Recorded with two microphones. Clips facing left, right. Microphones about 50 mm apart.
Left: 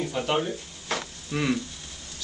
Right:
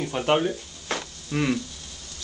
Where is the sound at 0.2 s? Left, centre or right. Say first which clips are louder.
Right 4 dB; right.